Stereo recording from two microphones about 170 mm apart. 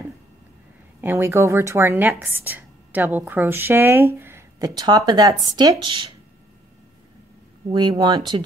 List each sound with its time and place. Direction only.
1.0 s speech: 15° right (ahead or behind)
7.7 s speech: 25° right (ahead or behind)